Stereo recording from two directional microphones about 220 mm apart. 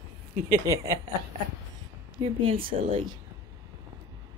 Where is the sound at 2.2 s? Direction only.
25° right (ahead or behind).